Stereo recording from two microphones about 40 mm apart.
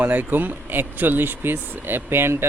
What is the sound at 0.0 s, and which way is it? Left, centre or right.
Speech, right.